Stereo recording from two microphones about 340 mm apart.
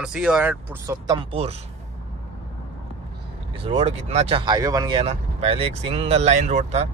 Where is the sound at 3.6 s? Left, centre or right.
Centre.